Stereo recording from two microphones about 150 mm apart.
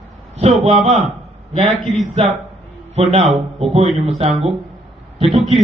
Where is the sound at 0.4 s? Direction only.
45° right (ahead or behind).